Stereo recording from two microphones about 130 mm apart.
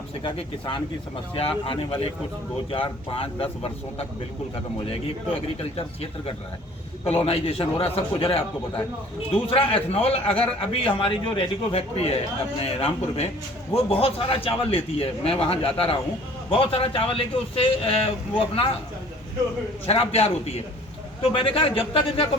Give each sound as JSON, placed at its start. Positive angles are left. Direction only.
{"t": 0.2, "sound": "a man's voice", "side_deg": 40}
{"t": 5.7, "sound": "a man's voice", "side_deg": 50}
{"t": 19.8, "sound": "a man's voice", "side_deg": 50}